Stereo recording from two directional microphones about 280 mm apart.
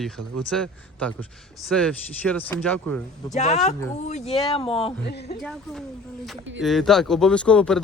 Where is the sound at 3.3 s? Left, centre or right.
Left.